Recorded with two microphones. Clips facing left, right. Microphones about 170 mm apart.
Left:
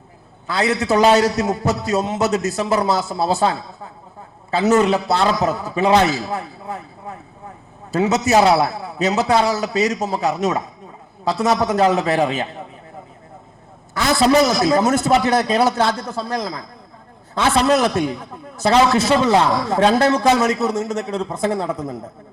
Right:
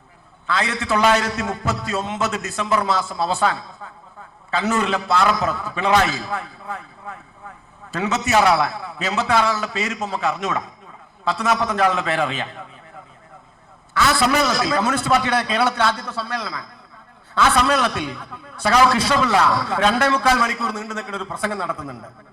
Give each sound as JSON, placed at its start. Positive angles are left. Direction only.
{"t": 0.9, "sound": "a man's voice", "side_deg": 40}
{"t": 4.8, "sound": "a man's voice", "side_deg": 30}
{"t": 13.9, "sound": "a man's voice", "side_deg": 35}
{"t": 17.3, "sound": "a man's voice", "side_deg": 30}
{"t": 17.7, "sound": "a man's voice", "side_deg": 40}
{"t": 18.2, "sound": "a man's voice", "side_deg": 30}
{"t": 19.6, "sound": "a man's voice", "side_deg": 40}
{"t": 20.2, "sound": "a man's voice", "side_deg": 20}
{"t": 20.5, "sound": "a man's voice", "side_deg": 40}